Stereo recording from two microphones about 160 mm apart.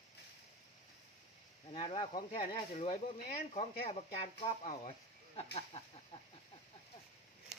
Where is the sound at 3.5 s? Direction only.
40° left (ahead or behind).